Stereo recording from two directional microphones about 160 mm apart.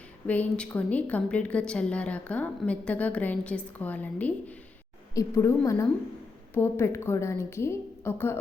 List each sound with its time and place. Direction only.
0.3 s a woman's voice: 10° left (ahead or behind)